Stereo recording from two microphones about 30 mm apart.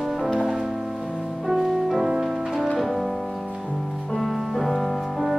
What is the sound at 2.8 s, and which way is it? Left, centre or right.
Music, centre.